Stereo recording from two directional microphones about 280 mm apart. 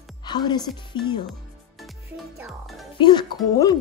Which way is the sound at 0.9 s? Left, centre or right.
Centre.